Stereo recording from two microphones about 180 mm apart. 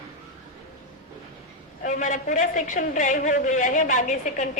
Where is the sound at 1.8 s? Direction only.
45° left (ahead or behind).